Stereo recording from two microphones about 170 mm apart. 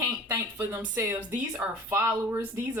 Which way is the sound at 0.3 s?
15° right (ahead or behind).